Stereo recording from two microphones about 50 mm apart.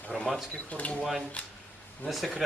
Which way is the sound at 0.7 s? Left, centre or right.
Left.